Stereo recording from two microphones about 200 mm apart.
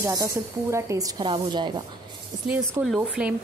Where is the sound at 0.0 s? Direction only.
15° right (ahead or behind).